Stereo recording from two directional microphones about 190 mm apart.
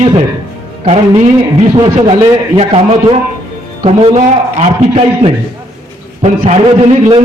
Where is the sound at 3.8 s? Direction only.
30° right (ahead or behind).